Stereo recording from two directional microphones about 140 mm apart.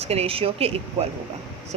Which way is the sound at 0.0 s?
45° right (ahead or behind).